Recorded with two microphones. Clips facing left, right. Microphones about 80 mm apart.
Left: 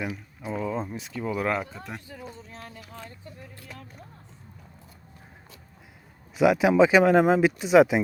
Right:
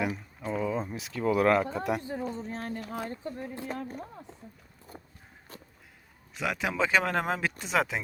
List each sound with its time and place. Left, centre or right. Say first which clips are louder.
0.4 s speech: left 1 dB; centre
2.0 s a sound: right 8 dB; right
6.3 s speech: left 11 dB; centre